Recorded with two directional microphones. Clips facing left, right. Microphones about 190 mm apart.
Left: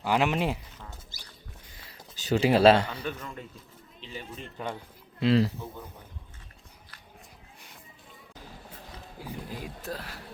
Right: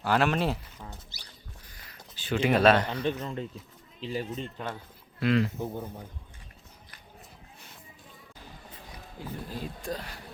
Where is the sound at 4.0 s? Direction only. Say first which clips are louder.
Right 9 dB; 40° right (ahead or behind).